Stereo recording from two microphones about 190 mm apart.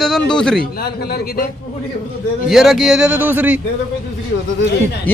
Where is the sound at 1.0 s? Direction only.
55° left (ahead or behind).